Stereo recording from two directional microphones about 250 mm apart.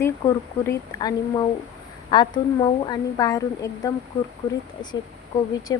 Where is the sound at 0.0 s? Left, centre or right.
Centre.